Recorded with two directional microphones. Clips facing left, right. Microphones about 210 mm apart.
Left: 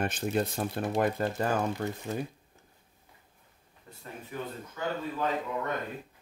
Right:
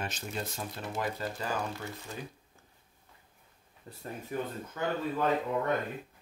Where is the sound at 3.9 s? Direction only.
35° right (ahead or behind).